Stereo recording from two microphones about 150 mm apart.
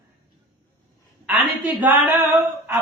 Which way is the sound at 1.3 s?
10° right (ahead or behind).